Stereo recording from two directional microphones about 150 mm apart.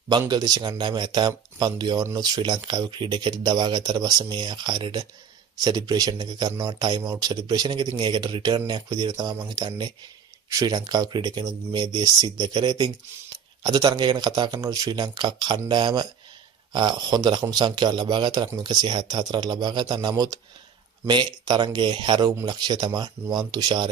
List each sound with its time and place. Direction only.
0.3 s speech: 25° right (ahead or behind)